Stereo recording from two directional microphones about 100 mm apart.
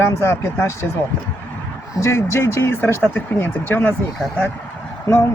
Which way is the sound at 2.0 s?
25° left (ahead or behind).